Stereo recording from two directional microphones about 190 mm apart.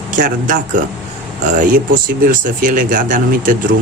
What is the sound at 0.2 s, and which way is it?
Speech, 45° right (ahead or behind).